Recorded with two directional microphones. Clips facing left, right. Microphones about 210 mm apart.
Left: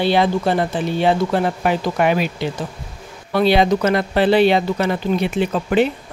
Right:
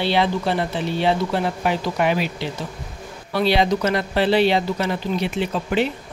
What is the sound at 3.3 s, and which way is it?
Speech, 50° left (ahead or behind).